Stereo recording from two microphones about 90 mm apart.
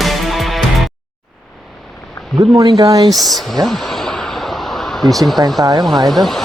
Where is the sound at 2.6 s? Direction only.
55° right (ahead or behind).